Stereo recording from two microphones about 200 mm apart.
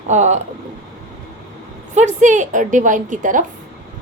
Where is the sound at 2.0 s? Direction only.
35° right (ahead or behind).